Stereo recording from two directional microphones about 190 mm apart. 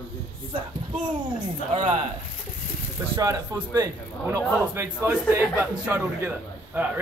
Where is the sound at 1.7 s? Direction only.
30° right (ahead or behind).